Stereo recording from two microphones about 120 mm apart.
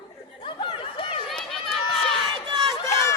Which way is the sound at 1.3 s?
5° left (ahead or behind).